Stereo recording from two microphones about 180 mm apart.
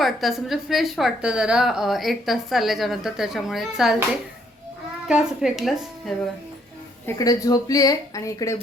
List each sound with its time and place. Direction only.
0.0 s a woman's voice: centre (ahead or behind)
5.0 s a woman's voice: 5° right (ahead or behind)
7.0 s speech: 20° left (ahead or behind)